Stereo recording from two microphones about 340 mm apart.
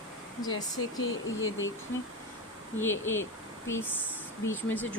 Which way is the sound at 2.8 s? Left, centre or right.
Centre.